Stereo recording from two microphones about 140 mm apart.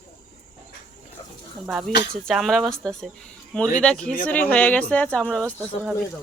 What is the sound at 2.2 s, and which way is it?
Speech, centre (ahead or behind).